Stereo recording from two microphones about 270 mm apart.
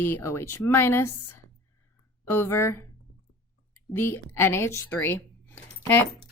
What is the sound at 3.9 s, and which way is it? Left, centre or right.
Speech, centre.